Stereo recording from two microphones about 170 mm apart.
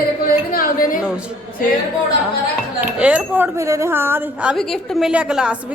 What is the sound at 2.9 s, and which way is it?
Speech, 5° right (ahead or behind).